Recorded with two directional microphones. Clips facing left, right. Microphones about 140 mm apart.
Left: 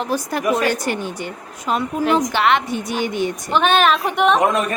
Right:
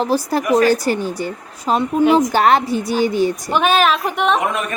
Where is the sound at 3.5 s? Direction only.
5° right (ahead or behind).